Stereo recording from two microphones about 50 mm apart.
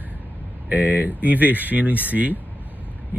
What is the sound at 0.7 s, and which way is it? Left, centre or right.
Speech, right.